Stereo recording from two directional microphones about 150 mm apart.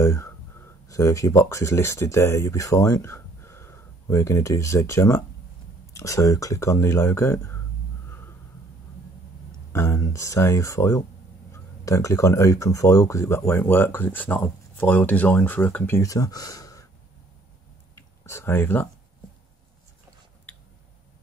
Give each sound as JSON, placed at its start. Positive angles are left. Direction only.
{"t": 0.0, "sound": "speech", "side_deg": 20}
{"t": 9.7, "sound": "speech", "side_deg": 20}
{"t": 17.9, "sound": "a sound", "side_deg": 15}